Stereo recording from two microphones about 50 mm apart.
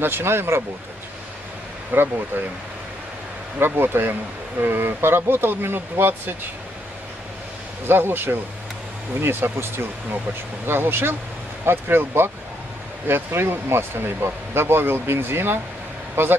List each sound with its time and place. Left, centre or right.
0.0 s speech: right
1.9 s speech: right
3.5 s speech: right
7.8 s speech: right